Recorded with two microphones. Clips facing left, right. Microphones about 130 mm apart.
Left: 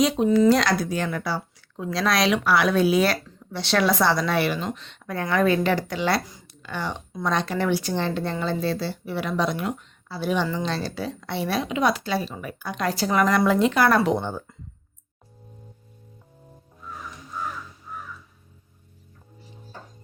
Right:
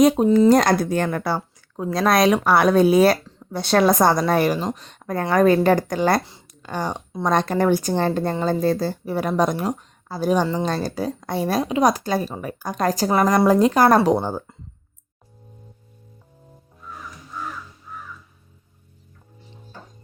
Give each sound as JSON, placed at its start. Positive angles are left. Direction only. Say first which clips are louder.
{"t": 0.0, "sound": "a woman's voice", "louder": "right 4 dB", "side_deg": -50}